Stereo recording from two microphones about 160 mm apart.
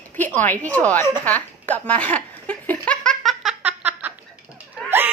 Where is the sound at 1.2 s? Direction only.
10° left (ahead or behind).